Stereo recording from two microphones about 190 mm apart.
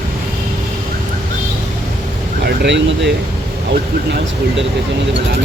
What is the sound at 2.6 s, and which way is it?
Speech, 65° right (ahead or behind).